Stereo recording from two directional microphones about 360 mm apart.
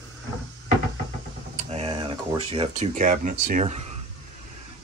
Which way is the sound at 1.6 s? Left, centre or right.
Centre.